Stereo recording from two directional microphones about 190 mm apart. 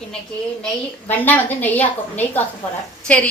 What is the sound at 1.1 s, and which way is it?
A woman's voice, 10° left (ahead or behind).